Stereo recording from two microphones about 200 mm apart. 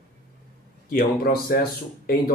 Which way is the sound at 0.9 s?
50° left (ahead or behind).